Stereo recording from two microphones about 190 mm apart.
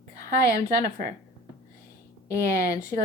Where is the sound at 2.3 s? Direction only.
15° left (ahead or behind).